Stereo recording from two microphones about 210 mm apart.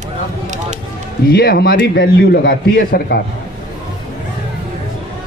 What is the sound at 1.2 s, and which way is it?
A man's voice, 45° left (ahead or behind).